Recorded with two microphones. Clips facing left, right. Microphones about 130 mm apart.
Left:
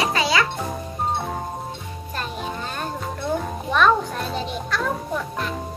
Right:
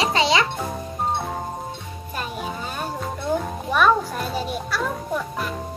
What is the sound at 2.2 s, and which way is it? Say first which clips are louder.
Music: even; 10° right (ahead or behind).